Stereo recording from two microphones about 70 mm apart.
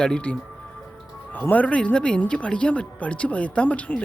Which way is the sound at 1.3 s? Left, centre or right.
Left.